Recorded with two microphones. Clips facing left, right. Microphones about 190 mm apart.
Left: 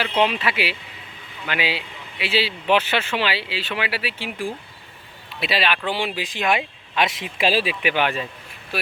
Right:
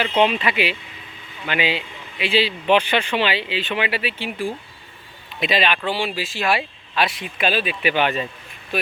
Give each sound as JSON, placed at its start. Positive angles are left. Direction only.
{"t": 0.2, "sound": "speech", "side_deg": 5}
{"t": 6.1, "sound": "speech", "side_deg": 15}
{"t": 7.8, "sound": "speech", "side_deg": 10}